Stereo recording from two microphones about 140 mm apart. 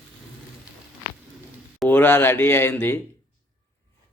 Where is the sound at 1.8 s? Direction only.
15° left (ahead or behind).